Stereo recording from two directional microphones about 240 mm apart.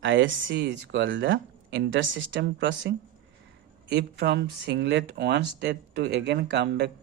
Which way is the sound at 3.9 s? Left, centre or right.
Right.